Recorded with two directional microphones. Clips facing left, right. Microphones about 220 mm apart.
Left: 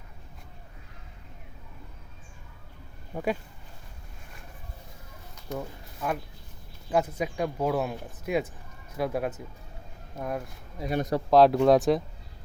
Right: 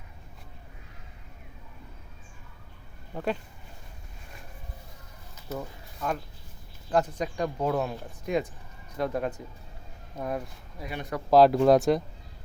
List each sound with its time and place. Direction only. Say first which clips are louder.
5.3 s a sound: left 1 dB; 5° right (ahead or behind)
6.0 s speech: even; 5° left (ahead or behind)
10.8 s speech: left 7 dB; 40° left (ahead or behind)
11.3 s speech: right 1 dB; centre (ahead or behind)